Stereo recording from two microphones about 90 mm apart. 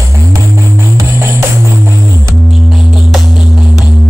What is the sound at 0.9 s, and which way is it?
Music, 30° right (ahead or behind).